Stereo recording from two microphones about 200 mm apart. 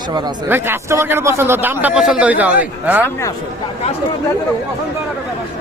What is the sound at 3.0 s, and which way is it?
Speech, 15° left (ahead or behind).